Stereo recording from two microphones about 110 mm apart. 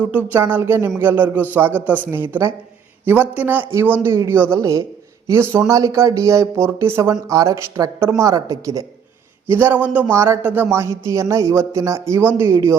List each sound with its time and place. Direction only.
0.0 s speech: 15° right (ahead or behind); by 8.8 s 30° right (ahead or behind)
9.5 s speech: 20° right (ahead or behind)